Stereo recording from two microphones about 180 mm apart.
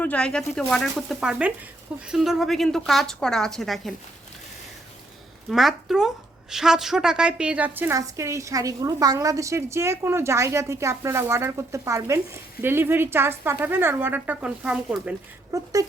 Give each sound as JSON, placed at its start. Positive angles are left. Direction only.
{"t": 0.0, "sound": "a woman's voice", "side_deg": 5}
{"t": 5.5, "sound": "a woman's voice", "side_deg": 0}
{"t": 15.5, "sound": "speech", "side_deg": -20}